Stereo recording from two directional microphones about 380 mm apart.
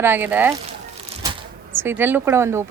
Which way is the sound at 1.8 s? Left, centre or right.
Centre.